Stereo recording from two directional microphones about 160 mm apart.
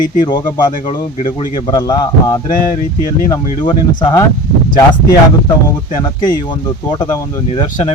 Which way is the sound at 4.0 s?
25° left (ahead or behind).